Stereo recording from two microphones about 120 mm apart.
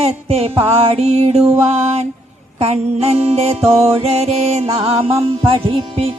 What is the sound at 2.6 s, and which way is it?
Music, 60° right (ahead or behind).